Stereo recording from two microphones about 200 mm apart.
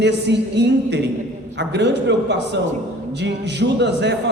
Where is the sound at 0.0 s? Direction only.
60° right (ahead or behind).